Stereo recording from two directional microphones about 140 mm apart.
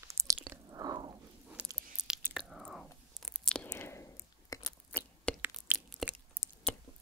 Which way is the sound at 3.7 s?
20° left (ahead or behind).